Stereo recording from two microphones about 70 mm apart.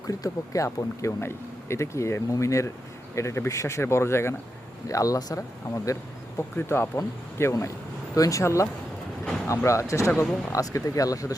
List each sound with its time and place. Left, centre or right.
0.1 s speech: left
4.9 s speech: left
6.6 s speech: left
8.1 s speech: left
9.6 s speech: left